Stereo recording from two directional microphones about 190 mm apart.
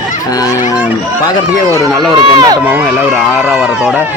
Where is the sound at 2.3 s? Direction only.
20° right (ahead or behind).